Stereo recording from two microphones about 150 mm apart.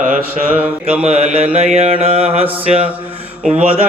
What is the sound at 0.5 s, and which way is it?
Mantra, 5° right (ahead or behind).